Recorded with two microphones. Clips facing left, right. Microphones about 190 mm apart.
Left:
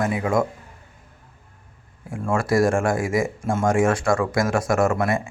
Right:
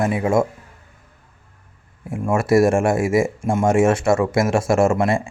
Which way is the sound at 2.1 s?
20° right (ahead or behind).